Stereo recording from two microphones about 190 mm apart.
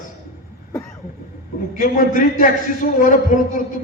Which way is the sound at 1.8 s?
45° left (ahead or behind).